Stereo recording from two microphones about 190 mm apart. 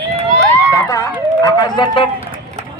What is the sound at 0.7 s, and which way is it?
Speech, 15° left (ahead or behind).